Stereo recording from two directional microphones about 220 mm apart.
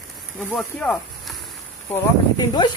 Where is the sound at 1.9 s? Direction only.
20° left (ahead or behind).